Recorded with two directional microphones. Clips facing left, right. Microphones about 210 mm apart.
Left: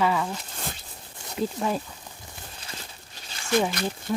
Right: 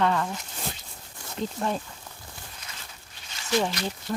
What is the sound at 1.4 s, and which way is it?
Speech, 5° left (ahead or behind).